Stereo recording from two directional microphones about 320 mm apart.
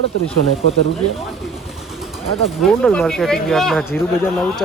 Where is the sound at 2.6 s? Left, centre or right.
Centre.